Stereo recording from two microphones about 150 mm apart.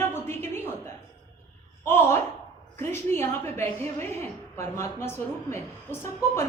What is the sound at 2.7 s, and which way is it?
A woman's voice, 15° left (ahead or behind).